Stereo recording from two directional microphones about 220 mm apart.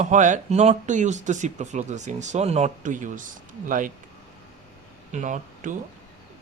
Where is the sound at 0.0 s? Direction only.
35° right (ahead or behind).